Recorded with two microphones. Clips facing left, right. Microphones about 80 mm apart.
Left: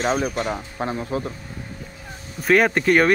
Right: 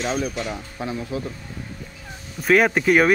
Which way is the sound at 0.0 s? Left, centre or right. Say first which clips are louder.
Left 3 dB; left.